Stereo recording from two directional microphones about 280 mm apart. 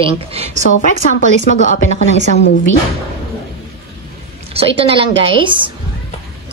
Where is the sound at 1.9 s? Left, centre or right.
Right.